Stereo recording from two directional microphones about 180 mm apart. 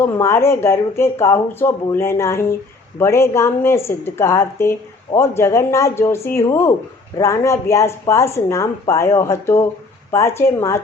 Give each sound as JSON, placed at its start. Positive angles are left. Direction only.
{"t": 0.0, "sound": "speech", "side_deg": 15}